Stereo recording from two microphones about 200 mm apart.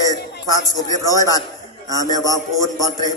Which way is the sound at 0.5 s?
20° left (ahead or behind).